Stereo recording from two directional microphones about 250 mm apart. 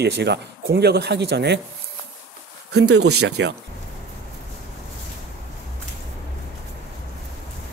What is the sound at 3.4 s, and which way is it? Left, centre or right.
Speech, right.